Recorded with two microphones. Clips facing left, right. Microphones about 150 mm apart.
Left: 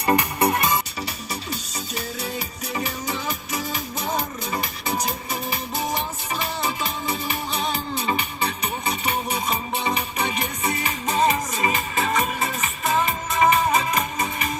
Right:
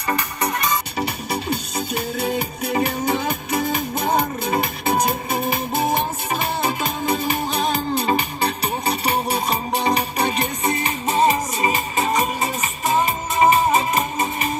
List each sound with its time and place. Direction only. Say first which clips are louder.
0.1 s music: left 3 dB; 10° left (ahead or behind)
0.4 s music: left 1 dB; 25° left (ahead or behind)
0.9 s music: right 7 dB; 60° right (ahead or behind); by 10.5 s 35° right (ahead or behind)
11.1 s music: right 3 dB; 20° right (ahead or behind)